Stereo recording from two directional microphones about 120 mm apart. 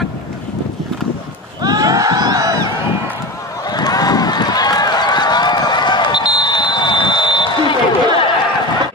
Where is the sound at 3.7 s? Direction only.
35° left (ahead or behind).